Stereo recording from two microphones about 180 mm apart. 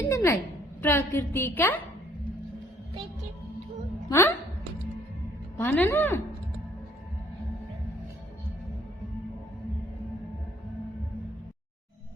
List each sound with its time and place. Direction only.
0.0 s a sound: 15° left (ahead or behind)
0.8 s a woman's voice: 10° left (ahead or behind)
4.1 s a woman's voice: 10° left (ahead or behind)
5.5 s a woman's voice: 10° left (ahead or behind)